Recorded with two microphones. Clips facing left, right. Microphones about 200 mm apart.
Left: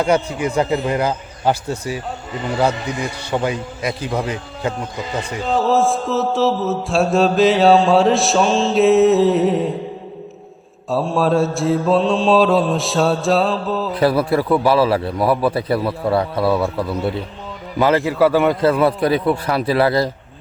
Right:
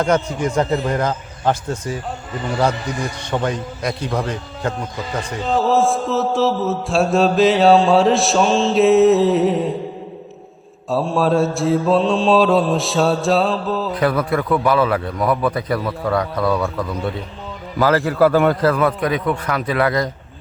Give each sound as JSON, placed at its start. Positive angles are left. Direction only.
{"t": 0.0, "sound": "a man's voice", "side_deg": 10}
{"t": 3.2, "sound": "a man's voice", "side_deg": 10}
{"t": 5.5, "sound": "mantra", "side_deg": 0}
{"t": 10.8, "sound": "mantra", "side_deg": 0}
{"t": 13.9, "sound": "a man's voice", "side_deg": 30}
{"t": 17.7, "sound": "a man's voice", "side_deg": 20}
{"t": 18.1, "sound": "mantra", "side_deg": 5}
{"t": 18.6, "sound": "a man's voice", "side_deg": 30}